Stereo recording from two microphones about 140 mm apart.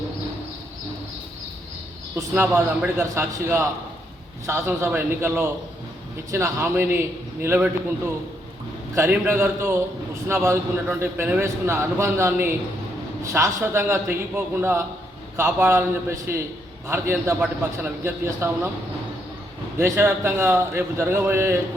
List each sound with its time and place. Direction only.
2.1 s a man's voice: 15° right (ahead or behind)
9.0 s a man's voice: 15° right (ahead or behind)
19.8 s a man's voice: 15° right (ahead or behind)